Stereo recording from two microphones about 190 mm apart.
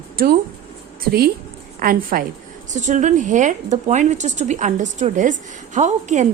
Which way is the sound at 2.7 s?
40° right (ahead or behind).